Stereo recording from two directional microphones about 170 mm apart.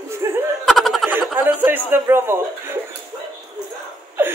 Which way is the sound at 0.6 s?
Centre (ahead or behind).